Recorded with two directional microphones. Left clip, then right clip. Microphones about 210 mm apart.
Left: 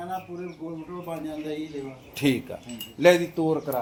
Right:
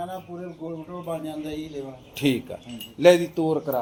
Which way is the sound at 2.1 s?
Centre (ahead or behind).